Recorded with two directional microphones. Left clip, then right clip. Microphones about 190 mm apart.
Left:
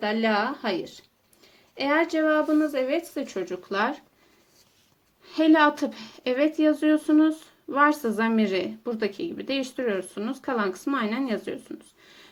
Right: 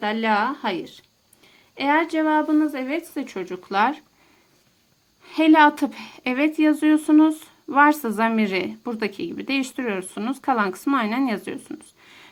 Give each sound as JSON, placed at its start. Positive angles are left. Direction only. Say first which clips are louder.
{"t": 0.0, "sound": "speech", "louder": "right 3 dB", "side_deg": -30}
{"t": 5.2, "sound": "a woman's voice", "louder": "right 4 dB", "side_deg": -35}